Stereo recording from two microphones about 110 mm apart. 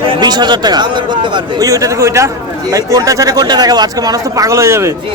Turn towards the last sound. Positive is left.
turn(degrees=-25)  # may be behind; listen again after turning